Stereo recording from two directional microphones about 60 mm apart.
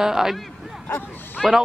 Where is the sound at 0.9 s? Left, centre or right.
Left.